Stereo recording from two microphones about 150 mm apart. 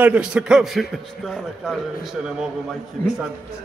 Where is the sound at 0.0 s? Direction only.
5° right (ahead or behind).